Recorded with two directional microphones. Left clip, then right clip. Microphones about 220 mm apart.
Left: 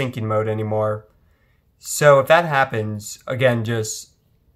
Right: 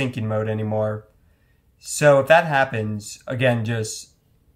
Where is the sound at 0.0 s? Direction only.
25° left (ahead or behind).